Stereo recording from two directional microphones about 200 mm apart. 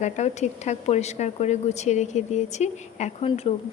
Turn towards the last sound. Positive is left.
turn(degrees=30)  # may be behind; listen again after turning